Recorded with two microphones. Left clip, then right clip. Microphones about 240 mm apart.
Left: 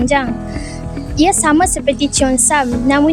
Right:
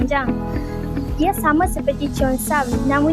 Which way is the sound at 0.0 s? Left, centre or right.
Left.